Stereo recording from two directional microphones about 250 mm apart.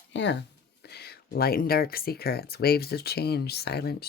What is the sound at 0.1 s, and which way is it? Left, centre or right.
Speech, left.